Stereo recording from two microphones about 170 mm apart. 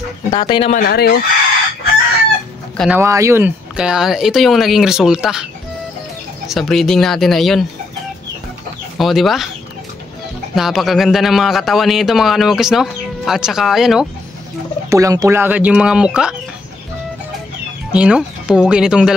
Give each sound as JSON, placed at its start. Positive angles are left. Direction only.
{"t": 0.3, "sound": "speech", "side_deg": 30}
{"t": 0.7, "sound": "speech", "side_deg": 55}
{"t": 2.9, "sound": "a man's voice", "side_deg": -15}
{"t": 8.9, "sound": "a man's voice", "side_deg": 0}
{"t": 10.5, "sound": "a man's voice", "side_deg": 0}
{"t": 14.9, "sound": "speech", "side_deg": -20}
{"t": 17.9, "sound": "a man's voice", "side_deg": -5}